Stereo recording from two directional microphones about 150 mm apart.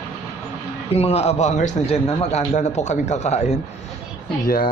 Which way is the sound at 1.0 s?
45° left (ahead or behind).